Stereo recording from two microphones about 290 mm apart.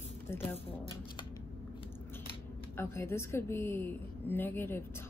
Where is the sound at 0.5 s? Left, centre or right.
Centre.